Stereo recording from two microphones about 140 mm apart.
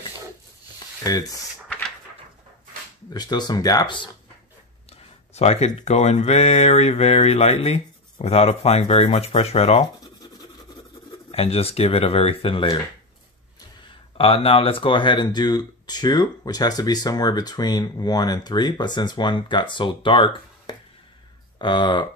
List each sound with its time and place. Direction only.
1.0 s speech: 25° left (ahead or behind)
3.1 s speech: 30° left (ahead or behind)
5.3 s speech: 50° left (ahead or behind)
11.3 s speech: 45° left (ahead or behind)
14.1 s speech: 40° left (ahead or behind)